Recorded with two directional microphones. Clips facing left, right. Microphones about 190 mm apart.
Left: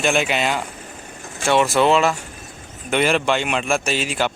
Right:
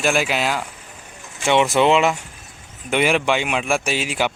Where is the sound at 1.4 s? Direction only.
20° right (ahead or behind).